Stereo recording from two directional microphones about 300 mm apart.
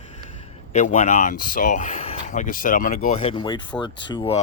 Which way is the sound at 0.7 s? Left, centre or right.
Left.